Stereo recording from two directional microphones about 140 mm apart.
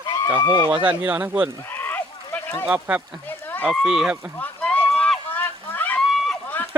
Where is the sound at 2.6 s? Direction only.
10° right (ahead or behind).